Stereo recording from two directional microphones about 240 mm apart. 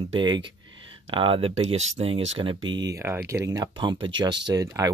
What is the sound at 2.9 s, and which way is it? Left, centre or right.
Speech, centre.